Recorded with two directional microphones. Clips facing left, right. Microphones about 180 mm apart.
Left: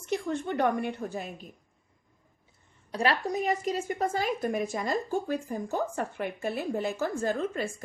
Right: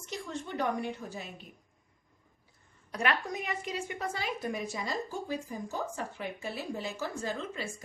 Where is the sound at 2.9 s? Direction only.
35° left (ahead or behind).